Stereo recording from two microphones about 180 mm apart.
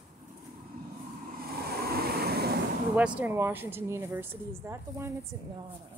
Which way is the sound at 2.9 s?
5° right (ahead or behind).